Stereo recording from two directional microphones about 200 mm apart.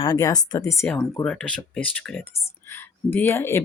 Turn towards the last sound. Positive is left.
turn(degrees=10)  # may be behind; listen again after turning